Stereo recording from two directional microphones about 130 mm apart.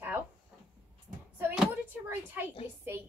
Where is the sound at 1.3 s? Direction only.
15° right (ahead or behind).